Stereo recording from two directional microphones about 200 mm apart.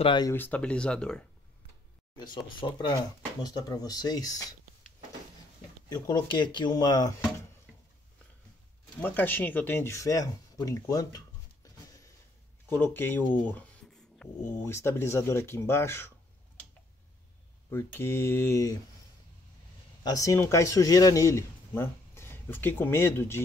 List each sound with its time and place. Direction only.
0.0 s speech: 25° left (ahead or behind)
0.3 s speech: 10° left (ahead or behind)
2.1 s speech: 20° left (ahead or behind)
5.9 s speech: 20° left (ahead or behind)
9.0 s speech: 10° left (ahead or behind)
17.6 s speech: 10° left (ahead or behind)
20.0 s speech: 20° left (ahead or behind)